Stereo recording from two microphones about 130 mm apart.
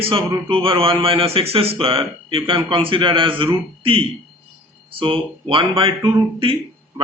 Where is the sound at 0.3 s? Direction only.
40° right (ahead or behind).